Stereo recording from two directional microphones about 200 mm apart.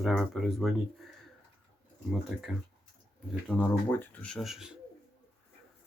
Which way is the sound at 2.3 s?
Centre (ahead or behind).